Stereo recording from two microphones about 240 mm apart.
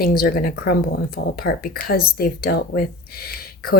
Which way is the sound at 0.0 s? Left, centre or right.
Left.